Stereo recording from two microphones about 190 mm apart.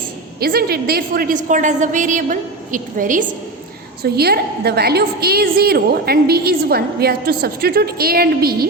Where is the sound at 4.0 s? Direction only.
55° right (ahead or behind).